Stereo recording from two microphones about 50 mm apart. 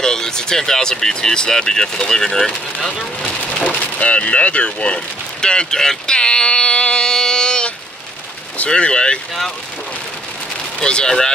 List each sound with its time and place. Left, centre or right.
0.0 s speech: centre
3.4 s a sound: left
8.6 s speech: centre
10.8 s speech: centre